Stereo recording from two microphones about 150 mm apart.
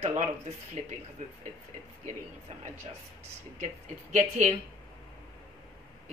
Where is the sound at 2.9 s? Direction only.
40° right (ahead or behind).